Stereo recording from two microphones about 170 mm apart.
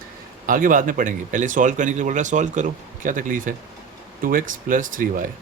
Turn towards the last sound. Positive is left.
turn(degrees=-50)  # may be behind; listen again after turning